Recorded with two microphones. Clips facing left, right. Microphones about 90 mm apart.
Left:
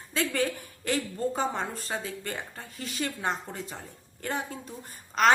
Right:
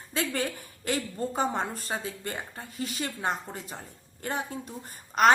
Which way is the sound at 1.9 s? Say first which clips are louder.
Even; 15° right (ahead or behind).